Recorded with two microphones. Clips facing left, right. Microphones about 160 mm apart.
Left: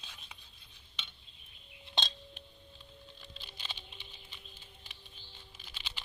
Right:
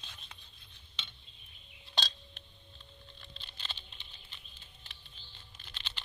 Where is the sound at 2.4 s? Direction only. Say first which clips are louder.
Left 4 dB; 10° left (ahead or behind).